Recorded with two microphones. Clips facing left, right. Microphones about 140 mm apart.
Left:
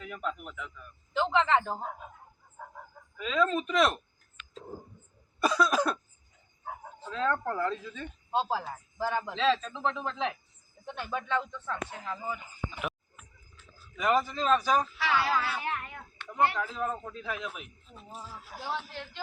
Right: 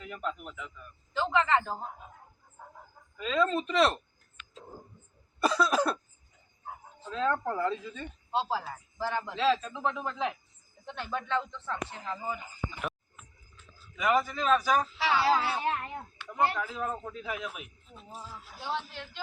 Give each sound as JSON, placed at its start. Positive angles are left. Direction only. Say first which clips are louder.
{"t": 0.0, "sound": "speech", "louder": "even", "side_deg": 0}
{"t": 1.1, "sound": "speech", "louder": "left 1 dB", "side_deg": 20}
{"t": 3.2, "sound": "speech", "louder": "even", "side_deg": 0}
{"t": 5.4, "sound": "cough", "louder": "even", "side_deg": 0}
{"t": 7.1, "sound": "speech", "louder": "even", "side_deg": -5}
{"t": 8.4, "sound": "speech", "louder": "left 1 dB", "side_deg": 15}
{"t": 9.3, "sound": "speech", "louder": "right 2 dB", "side_deg": -5}
{"t": 10.8, "sound": "speech", "louder": "even", "side_deg": 5}
{"t": 11.6, "sound": "a man's voice", "louder": "even", "side_deg": -15}
{"t": 13.9, "sound": "a man's voice", "louder": "even", "side_deg": 0}
{"t": 14.9, "sound": "speech", "louder": "right 2 dB", "side_deg": -30}
{"t": 16.3, "sound": "a man's voice", "louder": "left 1 dB", "side_deg": -5}
{"t": 17.9, "sound": "speech", "louder": "even", "side_deg": 5}
{"t": 18.5, "sound": "a man's voice", "louder": "left 2 dB", "side_deg": 90}